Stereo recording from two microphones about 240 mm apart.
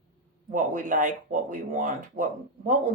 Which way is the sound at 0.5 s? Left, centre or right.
Right.